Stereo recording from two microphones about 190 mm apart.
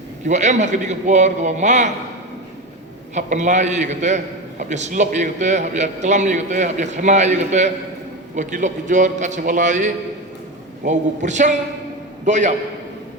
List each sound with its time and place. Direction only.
0.3 s a man's voice: 40° right (ahead or behind)
3.2 s a man's voice: 40° right (ahead or behind)